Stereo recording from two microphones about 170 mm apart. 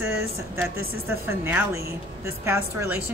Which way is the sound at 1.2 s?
10° right (ahead or behind).